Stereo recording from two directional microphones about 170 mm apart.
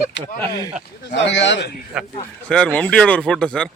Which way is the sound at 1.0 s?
90° left.